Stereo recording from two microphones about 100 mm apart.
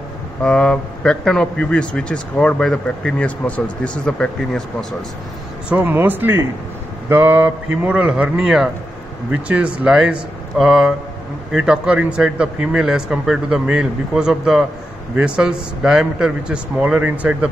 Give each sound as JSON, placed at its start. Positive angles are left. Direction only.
{"t": 0.4, "sound": "speech", "side_deg": 10}
{"t": 5.7, "sound": "speech", "side_deg": -15}